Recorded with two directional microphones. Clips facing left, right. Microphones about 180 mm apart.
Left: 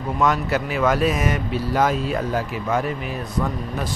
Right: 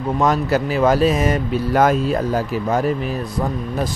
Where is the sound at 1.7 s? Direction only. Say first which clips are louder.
Right 5 dB; 50° right (ahead or behind).